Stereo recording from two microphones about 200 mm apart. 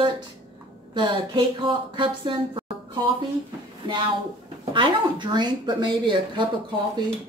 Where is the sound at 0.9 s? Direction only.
25° right (ahead or behind).